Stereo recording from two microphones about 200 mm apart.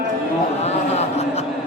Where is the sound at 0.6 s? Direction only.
35° left (ahead or behind).